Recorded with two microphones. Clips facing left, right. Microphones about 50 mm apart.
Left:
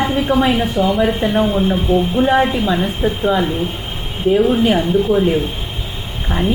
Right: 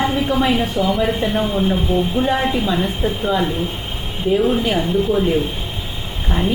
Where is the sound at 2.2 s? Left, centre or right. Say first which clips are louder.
Left 4 dB; centre.